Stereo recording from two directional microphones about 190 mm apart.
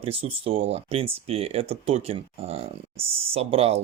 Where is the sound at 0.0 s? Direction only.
30° right (ahead or behind).